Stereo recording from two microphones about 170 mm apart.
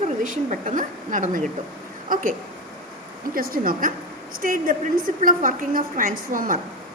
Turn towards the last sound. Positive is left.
turn(degrees=-55)  # may be behind; listen again after turning